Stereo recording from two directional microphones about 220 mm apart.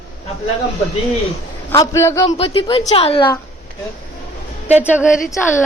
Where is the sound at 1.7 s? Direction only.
15° left (ahead or behind).